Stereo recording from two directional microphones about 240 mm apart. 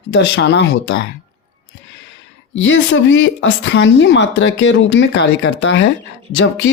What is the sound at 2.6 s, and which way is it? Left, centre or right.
Speech, left.